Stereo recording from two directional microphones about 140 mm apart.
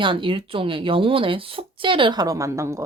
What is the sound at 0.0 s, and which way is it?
Speech, 35° right (ahead or behind).